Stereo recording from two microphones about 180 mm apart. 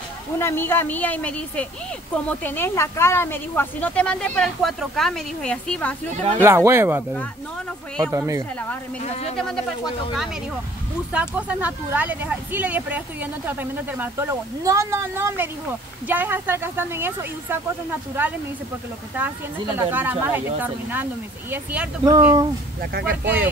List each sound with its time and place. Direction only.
0.4 s a woman's voice: 15° left (ahead or behind)
6.4 s speech: 15° right (ahead or behind)
8.0 s speech: 15° right (ahead or behind)
11.1 s speech: 10° right (ahead or behind)
22.8 s speech: 60° right (ahead or behind)